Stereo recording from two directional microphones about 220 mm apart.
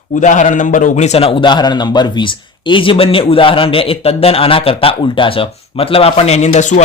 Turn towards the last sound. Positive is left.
turn(degrees=35)  # may be behind; listen again after turning